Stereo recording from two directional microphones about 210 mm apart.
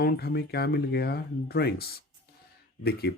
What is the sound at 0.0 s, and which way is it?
Speech, 45° left (ahead or behind).